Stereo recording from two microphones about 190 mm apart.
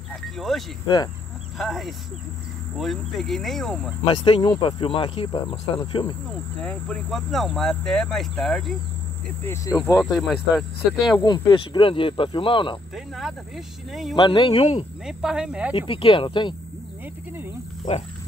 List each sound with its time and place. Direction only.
0.4 s speech: centre (ahead or behind)
0.8 s speech: 25° left (ahead or behind)
1.6 s speech: centre (ahead or behind)
4.0 s speech: 25° left (ahead or behind)
6.6 s speech: 5° left (ahead or behind)
9.4 s speech: 15° left (ahead or behind)
10.1 s speech: centre (ahead or behind)
11.1 s speech: 20° left (ahead or behind)
12.9 s speech: centre (ahead or behind)
14.1 s speech: 25° left (ahead or behind)
15.0 s speech: 5° right (ahead or behind)
15.9 s speech: 30° left (ahead or behind)